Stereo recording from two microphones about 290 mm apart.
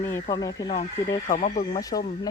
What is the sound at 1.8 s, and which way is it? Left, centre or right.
Speech, centre.